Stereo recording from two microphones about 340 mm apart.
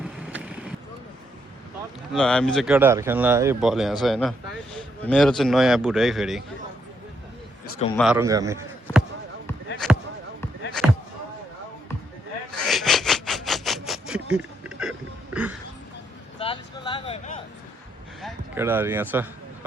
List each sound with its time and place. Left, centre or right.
0.0 s vehicle: centre
2.1 s speech: centre
7.9 s speech: centre
9.8 s basketball bounce: centre
12.5 s a sound: centre
16.4 s a sound: centre
18.2 s a man's voice: centre